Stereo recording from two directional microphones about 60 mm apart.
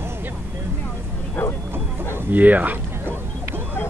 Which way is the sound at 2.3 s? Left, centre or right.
Right.